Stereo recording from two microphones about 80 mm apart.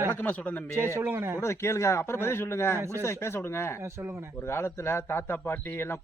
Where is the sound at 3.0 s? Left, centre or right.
Left.